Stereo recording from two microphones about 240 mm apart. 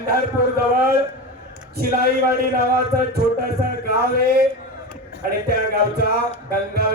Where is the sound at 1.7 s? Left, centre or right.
Right.